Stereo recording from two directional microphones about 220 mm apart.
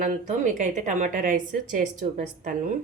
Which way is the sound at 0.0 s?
35° right (ahead or behind).